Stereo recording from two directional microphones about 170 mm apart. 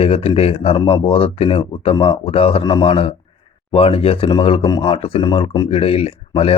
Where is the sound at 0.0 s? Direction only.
35° left (ahead or behind).